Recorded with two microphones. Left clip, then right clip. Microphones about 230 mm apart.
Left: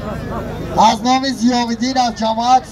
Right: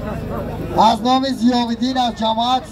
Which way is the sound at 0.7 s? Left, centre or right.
Left.